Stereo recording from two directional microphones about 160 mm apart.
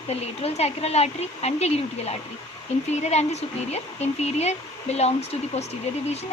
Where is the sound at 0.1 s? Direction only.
40° left (ahead or behind).